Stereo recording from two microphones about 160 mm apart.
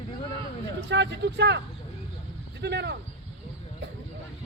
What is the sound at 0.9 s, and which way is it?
Speech, 90° right.